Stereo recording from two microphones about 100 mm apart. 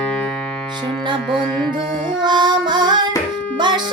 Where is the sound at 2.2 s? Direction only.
50° right (ahead or behind).